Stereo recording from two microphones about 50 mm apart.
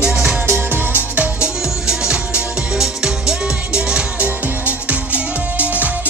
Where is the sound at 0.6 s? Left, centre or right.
Right.